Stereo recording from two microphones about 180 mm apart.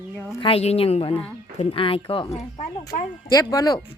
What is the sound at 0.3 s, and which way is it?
Speech, 30° left (ahead or behind).